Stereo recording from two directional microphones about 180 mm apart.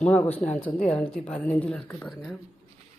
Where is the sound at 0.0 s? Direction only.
10° left (ahead or behind).